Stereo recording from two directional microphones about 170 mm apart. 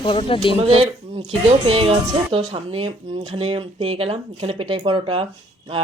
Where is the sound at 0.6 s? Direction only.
35° right (ahead or behind).